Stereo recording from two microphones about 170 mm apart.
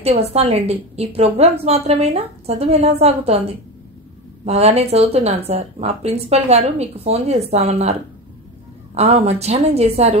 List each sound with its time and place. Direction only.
0.0 s a woman's voice: 40° right (ahead or behind)
4.5 s a woman's voice: 40° right (ahead or behind)
8.9 s a woman's voice: 40° right (ahead or behind)